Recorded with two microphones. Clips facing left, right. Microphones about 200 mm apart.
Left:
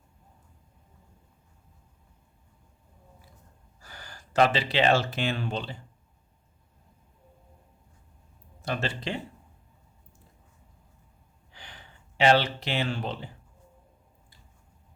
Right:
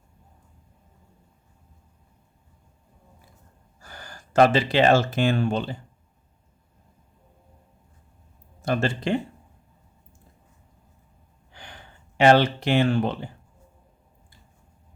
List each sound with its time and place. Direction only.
3.8 s speech: 50° right (ahead or behind)
8.6 s speech: 50° right (ahead or behind)
11.5 s speech: 50° right (ahead or behind)